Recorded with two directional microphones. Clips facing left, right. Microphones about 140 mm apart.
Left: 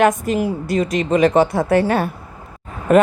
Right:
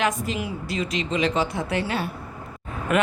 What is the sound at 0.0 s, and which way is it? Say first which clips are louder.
A woman's voice: left 9 dB; 45° left (ahead or behind).